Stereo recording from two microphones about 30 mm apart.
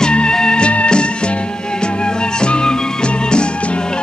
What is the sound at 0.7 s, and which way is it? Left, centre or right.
Music, left.